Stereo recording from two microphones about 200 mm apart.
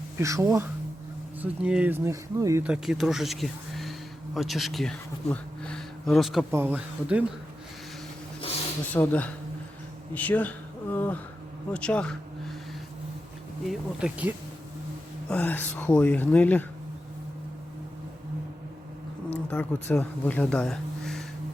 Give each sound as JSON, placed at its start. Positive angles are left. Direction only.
{"t": 0.2, "sound": "speech", "side_deg": -15}
{"t": 2.6, "sound": "speech", "side_deg": -5}
{"t": 8.9, "sound": "speech", "side_deg": 5}
{"t": 10.9, "sound": "a sound", "side_deg": 10}
{"t": 11.7, "sound": "speech", "side_deg": 5}
{"t": 13.7, "sound": "speech", "side_deg": -5}
{"t": 15.3, "sound": "speech", "side_deg": 10}
{"t": 19.3, "sound": "speech", "side_deg": 10}